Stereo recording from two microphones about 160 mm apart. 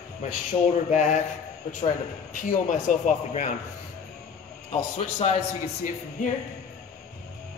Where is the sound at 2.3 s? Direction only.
55° left (ahead or behind).